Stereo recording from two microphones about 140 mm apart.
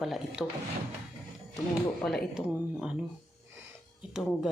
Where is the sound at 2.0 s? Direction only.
Centre (ahead or behind).